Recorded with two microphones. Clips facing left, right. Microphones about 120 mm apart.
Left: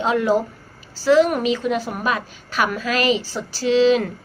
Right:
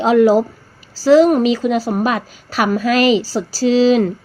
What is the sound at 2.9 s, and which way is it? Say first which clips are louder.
Speech: right 6 dB; 40° left (ahead or behind).